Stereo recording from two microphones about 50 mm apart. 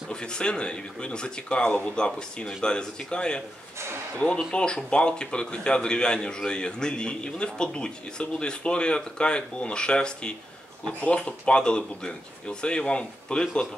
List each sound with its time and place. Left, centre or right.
0.1 s speech: centre
4.5 s speech: centre